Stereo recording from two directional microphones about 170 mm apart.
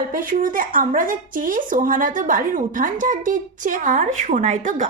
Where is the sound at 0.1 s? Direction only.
55° right (ahead or behind).